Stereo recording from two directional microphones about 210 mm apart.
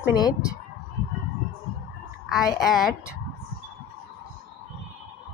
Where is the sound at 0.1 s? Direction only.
20° left (ahead or behind).